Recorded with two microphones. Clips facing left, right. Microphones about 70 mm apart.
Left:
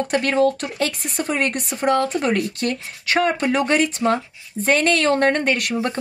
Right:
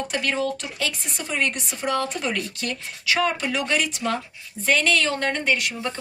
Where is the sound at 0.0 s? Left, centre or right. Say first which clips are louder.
Left 7 dB; left.